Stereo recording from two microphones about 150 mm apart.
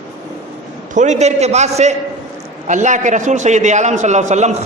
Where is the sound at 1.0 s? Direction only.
50° right (ahead or behind).